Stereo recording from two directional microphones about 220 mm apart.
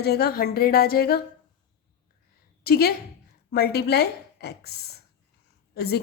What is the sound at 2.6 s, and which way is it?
A woman's voice, 45° left (ahead or behind).